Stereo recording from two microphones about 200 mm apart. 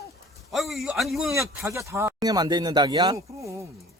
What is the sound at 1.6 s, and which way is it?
Speech, 15° right (ahead or behind).